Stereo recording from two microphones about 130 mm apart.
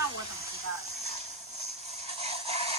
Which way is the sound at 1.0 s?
50° left (ahead or behind).